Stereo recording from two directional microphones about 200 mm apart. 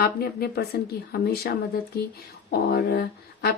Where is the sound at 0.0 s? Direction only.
50° left (ahead or behind).